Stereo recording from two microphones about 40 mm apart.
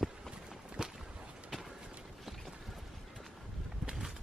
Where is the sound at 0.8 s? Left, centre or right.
Centre.